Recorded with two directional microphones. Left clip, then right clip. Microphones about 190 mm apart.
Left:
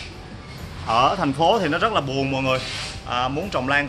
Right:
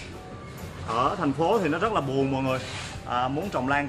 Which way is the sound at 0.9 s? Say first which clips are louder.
Left 7 dB; 40° left (ahead or behind).